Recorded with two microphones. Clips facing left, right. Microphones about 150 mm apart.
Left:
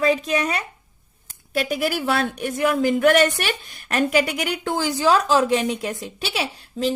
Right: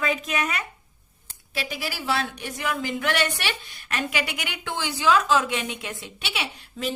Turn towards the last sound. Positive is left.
turn(degrees=40)  # may be behind; listen again after turning